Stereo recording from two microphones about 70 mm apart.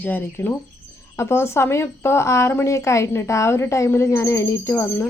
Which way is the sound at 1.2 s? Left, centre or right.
Left.